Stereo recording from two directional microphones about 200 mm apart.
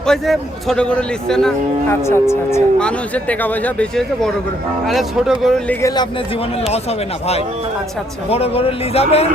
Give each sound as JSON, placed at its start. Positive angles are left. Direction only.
{"t": 0.1, "sound": "speech", "side_deg": 5}
{"t": 2.0, "sound": "speech", "side_deg": 15}
{"t": 8.3, "sound": "speech", "side_deg": 30}